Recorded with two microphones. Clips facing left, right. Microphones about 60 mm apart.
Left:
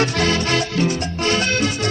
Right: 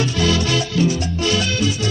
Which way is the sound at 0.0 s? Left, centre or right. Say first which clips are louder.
Even; left.